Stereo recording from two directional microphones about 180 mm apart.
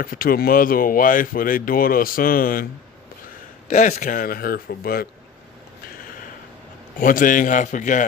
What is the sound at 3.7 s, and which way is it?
Speech, 40° left (ahead or behind).